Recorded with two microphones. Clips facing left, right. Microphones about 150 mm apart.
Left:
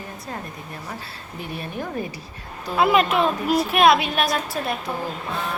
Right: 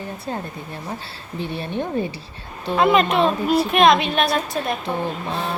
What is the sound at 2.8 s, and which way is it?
A woman's voice, 5° left (ahead or behind).